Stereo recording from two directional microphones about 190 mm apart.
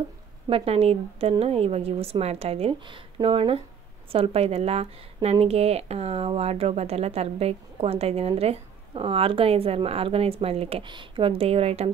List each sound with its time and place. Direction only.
0.5 s speech: 30° right (ahead or behind)